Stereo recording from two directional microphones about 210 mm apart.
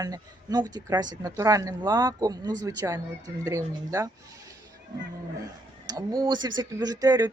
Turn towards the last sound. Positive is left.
turn(degrees=-20)  # may be behind; listen again after turning